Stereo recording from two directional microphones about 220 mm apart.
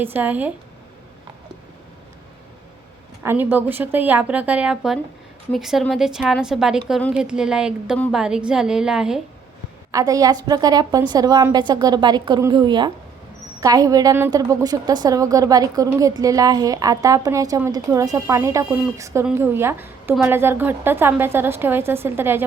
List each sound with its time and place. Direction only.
0.0 s a woman's voice: 10° right (ahead or behind)
3.2 s a woman's voice: 10° right (ahead or behind)
9.9 s a woman's voice: 15° right (ahead or behind)